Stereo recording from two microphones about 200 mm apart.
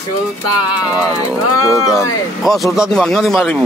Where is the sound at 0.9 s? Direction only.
15° left (ahead or behind).